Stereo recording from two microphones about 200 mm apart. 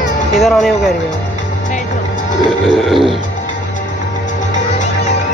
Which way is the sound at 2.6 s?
Centre (ahead or behind).